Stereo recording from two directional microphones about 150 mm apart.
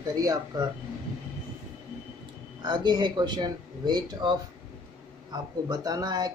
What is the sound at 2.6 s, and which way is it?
Speech, 30° right (ahead or behind).